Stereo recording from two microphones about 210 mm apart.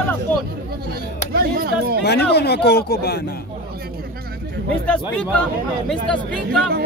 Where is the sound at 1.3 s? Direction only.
45° right (ahead or behind).